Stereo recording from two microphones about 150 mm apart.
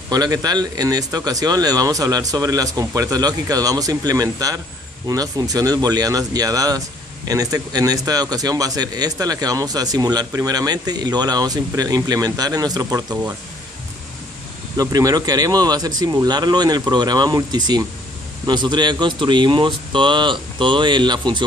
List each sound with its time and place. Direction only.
0.1 s speech: 25° right (ahead or behind)
14.8 s speech: 25° right (ahead or behind)